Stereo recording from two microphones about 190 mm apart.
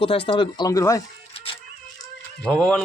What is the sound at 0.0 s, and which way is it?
Speech, 30° left (ahead or behind).